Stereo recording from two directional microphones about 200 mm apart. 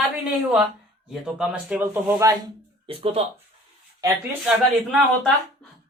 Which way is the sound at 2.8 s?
30° right (ahead or behind).